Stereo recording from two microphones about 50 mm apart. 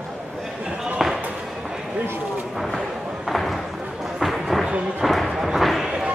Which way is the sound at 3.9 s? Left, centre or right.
Centre.